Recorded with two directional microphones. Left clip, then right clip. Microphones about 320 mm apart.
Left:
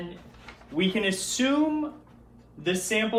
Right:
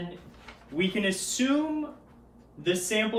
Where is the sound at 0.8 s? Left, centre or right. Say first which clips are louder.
Left 2 dB; centre.